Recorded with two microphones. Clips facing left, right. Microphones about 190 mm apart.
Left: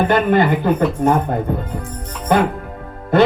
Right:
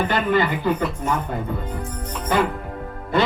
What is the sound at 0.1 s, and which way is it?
Speech, 50° left (ahead or behind).